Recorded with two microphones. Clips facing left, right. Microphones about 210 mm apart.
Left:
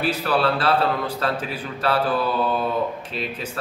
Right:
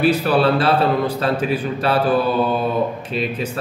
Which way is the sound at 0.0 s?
15° right (ahead or behind).